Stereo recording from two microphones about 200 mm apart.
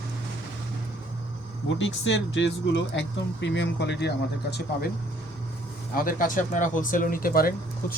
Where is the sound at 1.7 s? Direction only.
65° left (ahead or behind).